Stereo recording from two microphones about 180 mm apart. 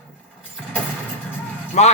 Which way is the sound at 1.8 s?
40° left (ahead or behind).